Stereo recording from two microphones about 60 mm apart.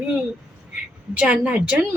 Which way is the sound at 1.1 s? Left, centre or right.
Right.